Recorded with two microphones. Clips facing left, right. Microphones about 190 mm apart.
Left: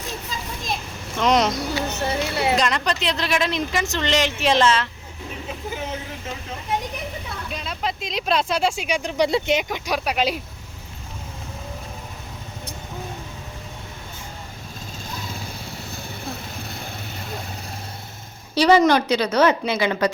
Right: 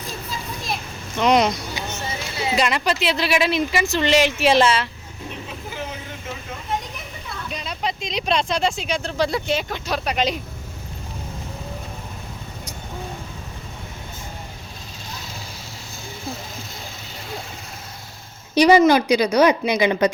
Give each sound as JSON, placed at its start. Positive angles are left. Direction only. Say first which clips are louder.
{"t": 1.2, "sound": "speech", "louder": "right 2 dB", "side_deg": 0}
{"t": 1.9, "sound": "speech", "louder": "left 6 dB", "side_deg": 65}
{"t": 2.6, "sound": "speech", "louder": "right 2 dB", "side_deg": -5}
{"t": 7.5, "sound": "speech", "louder": "right 1 dB", "side_deg": 0}
{"t": 18.5, "sound": "a woman's voice", "louder": "right 2 dB", "side_deg": -15}